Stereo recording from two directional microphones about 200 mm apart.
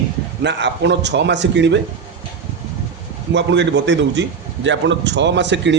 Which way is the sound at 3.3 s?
60° right (ahead or behind).